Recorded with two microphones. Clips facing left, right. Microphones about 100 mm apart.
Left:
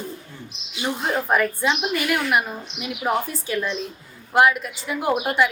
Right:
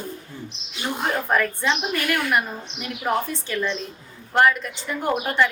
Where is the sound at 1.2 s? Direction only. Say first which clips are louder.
Left 2 dB; 10° left (ahead or behind).